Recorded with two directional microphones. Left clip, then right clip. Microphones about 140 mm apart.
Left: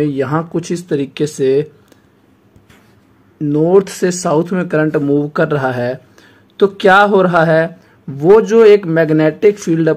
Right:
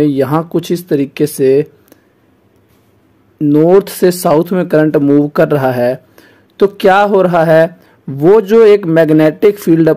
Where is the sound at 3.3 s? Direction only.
40° right (ahead or behind).